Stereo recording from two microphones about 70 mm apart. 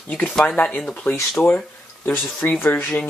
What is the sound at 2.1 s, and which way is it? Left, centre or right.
Speech, left.